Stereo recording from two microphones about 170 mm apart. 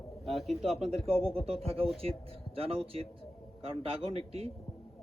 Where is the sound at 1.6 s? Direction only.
35° right (ahead or behind).